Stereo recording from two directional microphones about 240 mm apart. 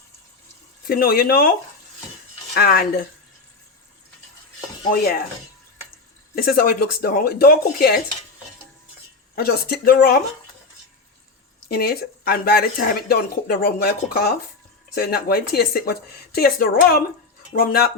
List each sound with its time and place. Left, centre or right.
0.9 s speech: left
6.3 s speech: left
9.3 s speech: left
11.7 s speech: left